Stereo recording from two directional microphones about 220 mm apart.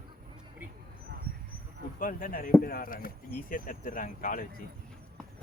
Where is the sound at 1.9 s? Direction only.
40° left (ahead or behind).